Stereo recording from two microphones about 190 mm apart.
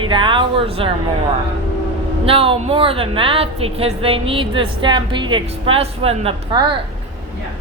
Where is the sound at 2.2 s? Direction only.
30° right (ahead or behind).